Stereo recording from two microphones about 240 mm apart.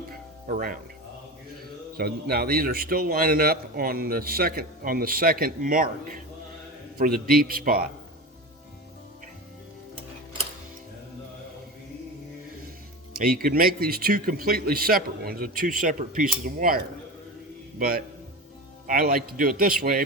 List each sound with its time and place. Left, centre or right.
0.4 s a man's voice: right
2.0 s a man's voice: right
13.2 s a man's voice: right